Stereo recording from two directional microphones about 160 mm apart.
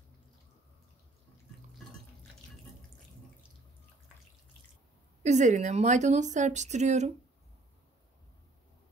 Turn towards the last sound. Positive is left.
turn(degrees=-45)  # may be behind; listen again after turning